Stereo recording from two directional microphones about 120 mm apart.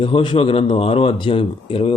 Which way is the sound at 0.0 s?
45° left (ahead or behind).